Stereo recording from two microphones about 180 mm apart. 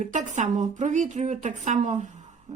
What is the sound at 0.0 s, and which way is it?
A woman's voice, 40° right (ahead or behind).